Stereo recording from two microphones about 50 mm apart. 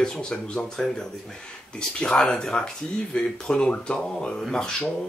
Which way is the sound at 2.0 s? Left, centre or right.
Centre.